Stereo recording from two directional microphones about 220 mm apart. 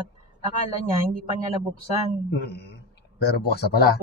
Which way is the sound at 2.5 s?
50° left (ahead or behind).